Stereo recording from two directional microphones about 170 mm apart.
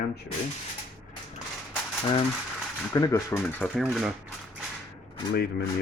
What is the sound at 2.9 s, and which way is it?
Speech, 20° left (ahead or behind).